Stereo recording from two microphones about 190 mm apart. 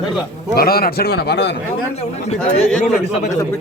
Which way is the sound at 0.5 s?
55° left (ahead or behind).